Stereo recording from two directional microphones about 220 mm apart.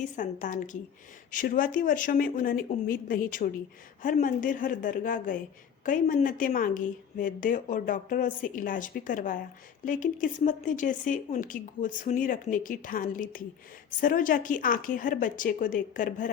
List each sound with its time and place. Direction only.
0.2 s speech: 35° left (ahead or behind)